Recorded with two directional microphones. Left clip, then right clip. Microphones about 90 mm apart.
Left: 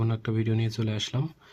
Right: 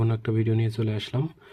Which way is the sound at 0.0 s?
30° right (ahead or behind).